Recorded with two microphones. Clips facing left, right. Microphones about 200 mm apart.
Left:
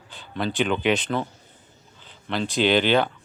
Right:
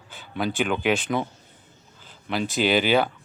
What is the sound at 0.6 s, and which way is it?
Speech, centre (ahead or behind).